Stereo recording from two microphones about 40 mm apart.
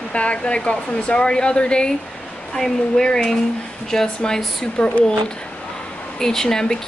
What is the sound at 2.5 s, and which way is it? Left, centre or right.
Speech, centre.